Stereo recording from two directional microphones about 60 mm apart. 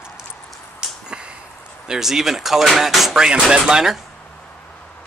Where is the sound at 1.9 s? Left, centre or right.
Centre.